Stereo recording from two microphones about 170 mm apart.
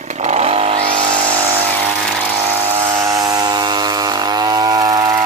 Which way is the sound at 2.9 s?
20° right (ahead or behind).